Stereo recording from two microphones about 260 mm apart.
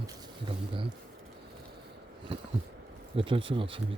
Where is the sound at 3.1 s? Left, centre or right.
Centre.